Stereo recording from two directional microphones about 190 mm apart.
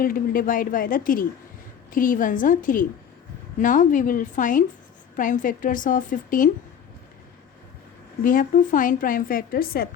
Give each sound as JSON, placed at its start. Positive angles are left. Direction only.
{"t": 0.0, "sound": "a woman's voice", "side_deg": 45}
{"t": 8.2, "sound": "a woman's voice", "side_deg": 45}